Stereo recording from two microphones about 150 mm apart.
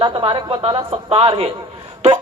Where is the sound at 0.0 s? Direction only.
30° right (ahead or behind).